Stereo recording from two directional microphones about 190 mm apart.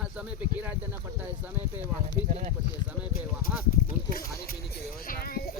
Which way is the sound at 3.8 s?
50° left (ahead or behind).